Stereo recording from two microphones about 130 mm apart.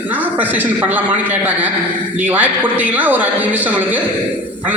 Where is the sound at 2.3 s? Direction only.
15° right (ahead or behind).